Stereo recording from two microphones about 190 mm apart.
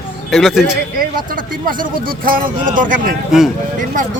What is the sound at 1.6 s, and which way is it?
Speech, 45° right (ahead or behind).